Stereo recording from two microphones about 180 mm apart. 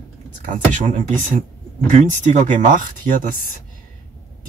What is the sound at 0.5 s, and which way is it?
Speech, 45° right (ahead or behind).